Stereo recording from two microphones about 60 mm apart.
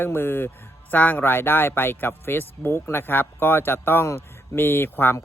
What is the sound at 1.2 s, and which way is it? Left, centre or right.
Speech, left.